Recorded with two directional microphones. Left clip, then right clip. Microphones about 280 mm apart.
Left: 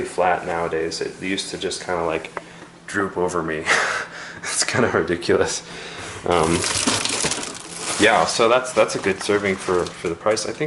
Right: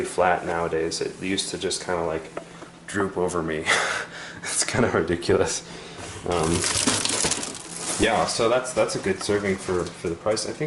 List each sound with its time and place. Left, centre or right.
0.0 s speech: centre
6.3 s a sound: centre
8.0 s speech: centre